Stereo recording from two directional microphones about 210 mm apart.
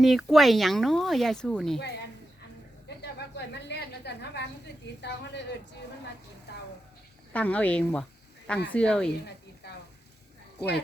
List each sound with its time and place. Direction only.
0.0 s speech: centre (ahead or behind)
3.0 s a sound: 55° left (ahead or behind)
4.9 s speech: 55° left (ahead or behind)
7.3 s speech: 5° left (ahead or behind)
9.6 s frying: 50° left (ahead or behind)